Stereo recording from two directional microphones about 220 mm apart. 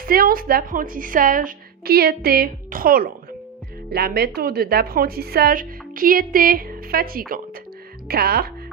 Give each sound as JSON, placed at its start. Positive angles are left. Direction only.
{"t": 0.0, "sound": "a woman's voice", "side_deg": -40}